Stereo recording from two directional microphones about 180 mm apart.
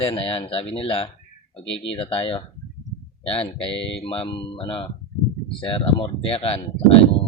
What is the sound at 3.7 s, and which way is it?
Speech, 90° left.